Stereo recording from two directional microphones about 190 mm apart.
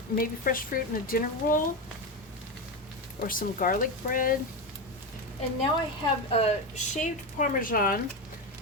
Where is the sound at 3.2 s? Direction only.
45° left (ahead or behind).